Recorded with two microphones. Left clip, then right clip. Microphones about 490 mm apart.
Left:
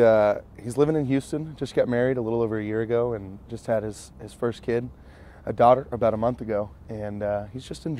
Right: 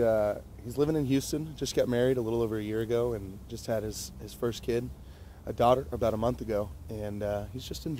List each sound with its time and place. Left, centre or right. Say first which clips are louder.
0.0 s speech: left 8 dB; left